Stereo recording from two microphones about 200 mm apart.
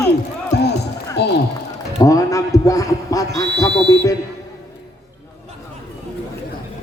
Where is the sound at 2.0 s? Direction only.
15° left (ahead or behind).